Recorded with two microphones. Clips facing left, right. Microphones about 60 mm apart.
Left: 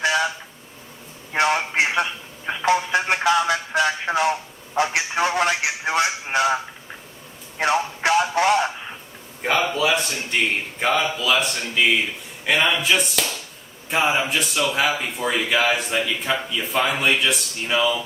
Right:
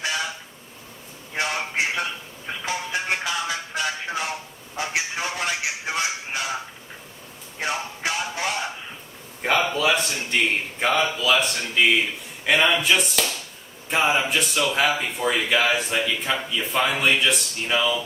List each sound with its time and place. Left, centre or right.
1.3 s a sound: left
2.6 s music: left
4.8 s a man's voice: left
7.6 s a man's voice: left
9.4 s speech: centre